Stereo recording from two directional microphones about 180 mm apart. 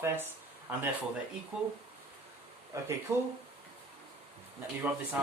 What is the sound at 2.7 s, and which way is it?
Speech, 15° right (ahead or behind).